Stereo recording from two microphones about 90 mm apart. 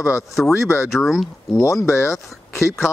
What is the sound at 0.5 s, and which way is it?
Speech, 35° left (ahead or behind).